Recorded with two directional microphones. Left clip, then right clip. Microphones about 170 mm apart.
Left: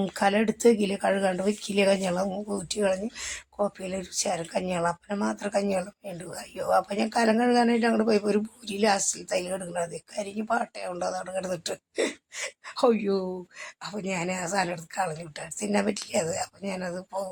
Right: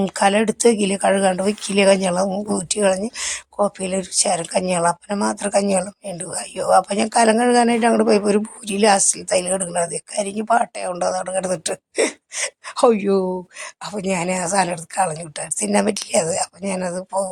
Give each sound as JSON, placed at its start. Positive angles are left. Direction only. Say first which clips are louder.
{"t": 0.0, "sound": "speech", "louder": "right 7 dB", "side_deg": -20}